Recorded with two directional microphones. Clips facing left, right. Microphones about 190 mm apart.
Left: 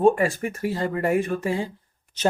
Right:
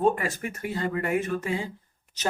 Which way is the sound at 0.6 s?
35° left (ahead or behind).